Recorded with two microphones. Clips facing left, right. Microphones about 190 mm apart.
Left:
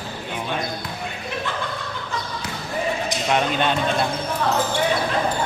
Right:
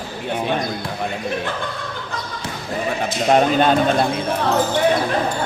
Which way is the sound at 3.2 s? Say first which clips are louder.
Right 7 dB; 40° right (ahead or behind).